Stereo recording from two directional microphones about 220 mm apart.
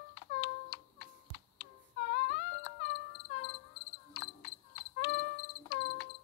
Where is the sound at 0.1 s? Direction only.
55° left (ahead or behind).